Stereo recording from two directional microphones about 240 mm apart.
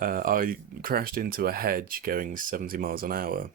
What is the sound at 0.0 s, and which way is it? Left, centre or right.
Speech, right.